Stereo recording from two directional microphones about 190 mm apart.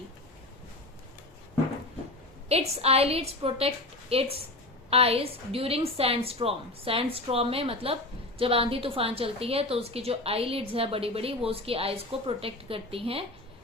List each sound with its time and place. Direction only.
2.5 s a woman's voice: 35° right (ahead or behind)